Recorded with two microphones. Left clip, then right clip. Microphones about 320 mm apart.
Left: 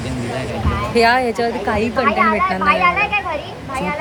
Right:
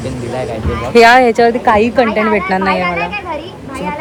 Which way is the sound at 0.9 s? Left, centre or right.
Right.